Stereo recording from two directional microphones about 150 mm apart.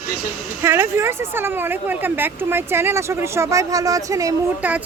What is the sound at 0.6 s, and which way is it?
A woman's voice, 15° right (ahead or behind).